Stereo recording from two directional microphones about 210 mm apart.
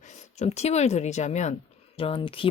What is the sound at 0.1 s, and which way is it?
Speech, 30° left (ahead or behind).